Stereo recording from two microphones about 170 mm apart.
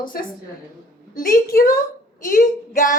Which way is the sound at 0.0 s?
55° left (ahead or behind).